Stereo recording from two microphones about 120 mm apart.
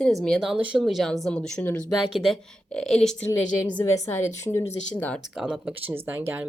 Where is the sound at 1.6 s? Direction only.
20° left (ahead or behind).